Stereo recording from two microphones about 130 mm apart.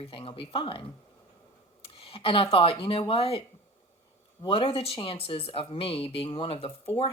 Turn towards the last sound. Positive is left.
turn(degrees=45)  # may be behind; listen again after turning